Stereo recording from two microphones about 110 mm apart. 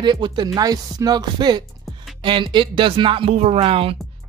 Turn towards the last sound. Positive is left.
turn(degrees=-60)  # may be behind; listen again after turning